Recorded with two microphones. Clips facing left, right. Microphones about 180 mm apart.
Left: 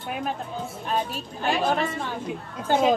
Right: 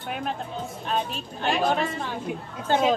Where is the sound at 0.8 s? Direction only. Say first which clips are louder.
Left 1 dB; 5° left (ahead or behind).